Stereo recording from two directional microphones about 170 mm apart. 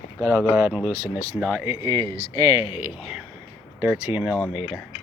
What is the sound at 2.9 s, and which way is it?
Speech, 5° right (ahead or behind).